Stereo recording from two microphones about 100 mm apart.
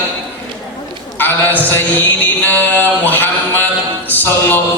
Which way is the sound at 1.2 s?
20° left (ahead or behind).